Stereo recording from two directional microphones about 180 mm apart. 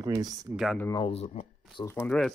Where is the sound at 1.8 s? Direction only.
15° left (ahead or behind).